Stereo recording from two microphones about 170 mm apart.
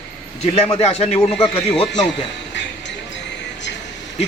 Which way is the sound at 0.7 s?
35° left (ahead or behind).